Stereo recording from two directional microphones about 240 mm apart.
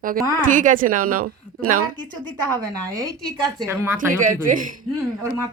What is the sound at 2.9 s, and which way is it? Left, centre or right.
Speech, centre.